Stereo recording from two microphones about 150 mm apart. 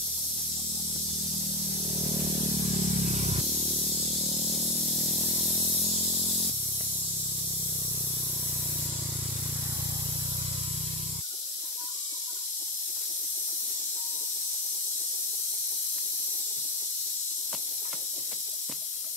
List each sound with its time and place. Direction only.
2.0 s spray: 40° right (ahead or behind)